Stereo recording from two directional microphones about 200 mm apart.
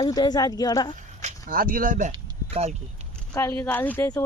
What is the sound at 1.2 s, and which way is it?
Speech, 40° right (ahead or behind).